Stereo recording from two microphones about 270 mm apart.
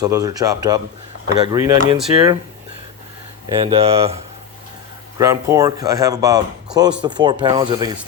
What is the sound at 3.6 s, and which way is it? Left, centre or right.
Speech, right.